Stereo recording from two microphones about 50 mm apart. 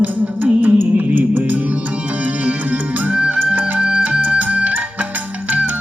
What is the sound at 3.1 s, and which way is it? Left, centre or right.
Music, right.